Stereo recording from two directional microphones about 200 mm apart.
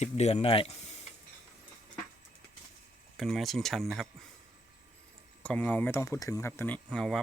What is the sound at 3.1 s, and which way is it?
Speech, centre (ahead or behind).